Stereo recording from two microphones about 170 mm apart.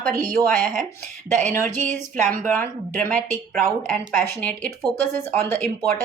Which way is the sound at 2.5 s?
10° left (ahead or behind).